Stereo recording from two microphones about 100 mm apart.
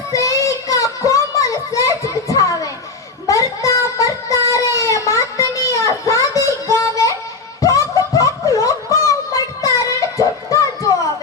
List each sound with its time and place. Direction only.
0.1 s child singing: 35° left (ahead or behind)
0.4 s children playing: 35° left (ahead or behind)
3.2 s a sound: 35° left (ahead or behind)
10.2 s music: 35° left (ahead or behind)